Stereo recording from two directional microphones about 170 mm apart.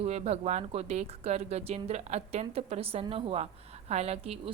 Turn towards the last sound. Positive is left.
turn(degrees=-35)  # may be behind; listen again after turning